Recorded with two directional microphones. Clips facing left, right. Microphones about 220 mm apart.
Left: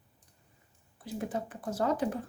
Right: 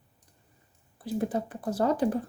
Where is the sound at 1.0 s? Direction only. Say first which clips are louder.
Right 6 dB; 35° right (ahead or behind).